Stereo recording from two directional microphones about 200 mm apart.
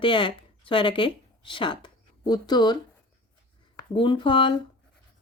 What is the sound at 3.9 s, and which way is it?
Speech, 25° left (ahead or behind).